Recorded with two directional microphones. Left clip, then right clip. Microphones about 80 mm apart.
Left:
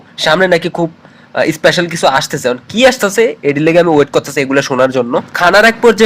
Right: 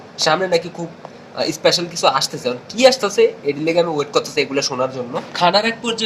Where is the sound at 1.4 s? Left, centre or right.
Left.